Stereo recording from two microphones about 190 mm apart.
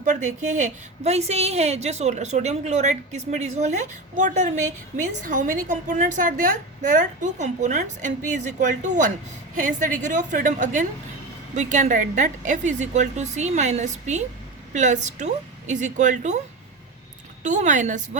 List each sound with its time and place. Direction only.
0.0 s a woman's voice: 40° right (ahead or behind)
17.4 s a woman's voice: 40° right (ahead or behind)